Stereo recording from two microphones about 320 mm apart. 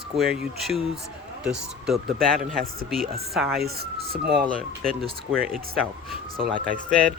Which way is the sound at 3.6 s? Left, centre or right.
Right.